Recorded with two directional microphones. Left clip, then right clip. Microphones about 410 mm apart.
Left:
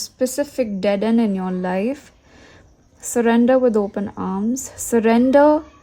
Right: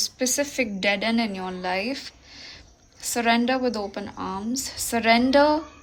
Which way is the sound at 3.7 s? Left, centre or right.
Centre.